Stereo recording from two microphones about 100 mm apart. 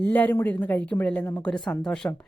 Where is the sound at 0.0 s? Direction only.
15° left (ahead or behind).